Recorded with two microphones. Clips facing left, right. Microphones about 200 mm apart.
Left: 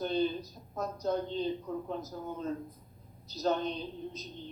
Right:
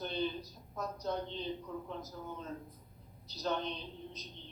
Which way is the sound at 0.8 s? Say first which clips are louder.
Left 5 dB; 45° left (ahead or behind).